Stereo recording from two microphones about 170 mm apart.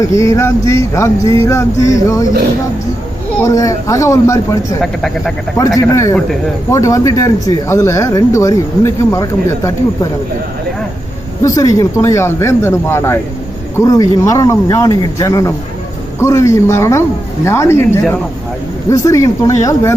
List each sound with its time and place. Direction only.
0.0 s speech: 15° left (ahead or behind)
3.4 s speech: 20° left (ahead or behind)
4.8 s speech: centre (ahead or behind)
5.5 s speech: 20° left (ahead or behind)
11.4 s speech: 20° left (ahead or behind)
19.0 s speech: 20° left (ahead or behind)